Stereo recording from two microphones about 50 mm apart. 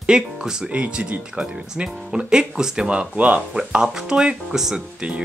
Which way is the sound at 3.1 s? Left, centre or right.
Right.